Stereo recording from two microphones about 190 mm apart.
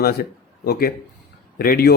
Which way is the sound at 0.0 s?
55° left (ahead or behind).